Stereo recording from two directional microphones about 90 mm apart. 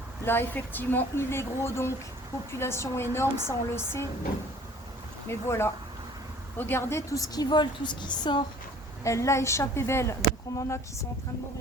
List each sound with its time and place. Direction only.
0.3 s a woman's voice: 25° left (ahead or behind)
5.3 s a woman's voice: 30° left (ahead or behind)
7.2 s a woman's voice: 55° left (ahead or behind)
9.0 s speech: 35° left (ahead or behind)